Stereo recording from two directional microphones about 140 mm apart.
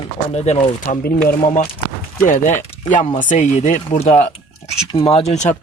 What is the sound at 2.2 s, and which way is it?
Speech, 70° left (ahead or behind).